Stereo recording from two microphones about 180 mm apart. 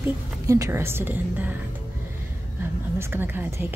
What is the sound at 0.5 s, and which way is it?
A woman's voice, 15° right (ahead or behind).